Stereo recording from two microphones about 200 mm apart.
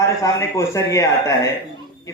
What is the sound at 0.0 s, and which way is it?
A man's voice, 15° left (ahead or behind).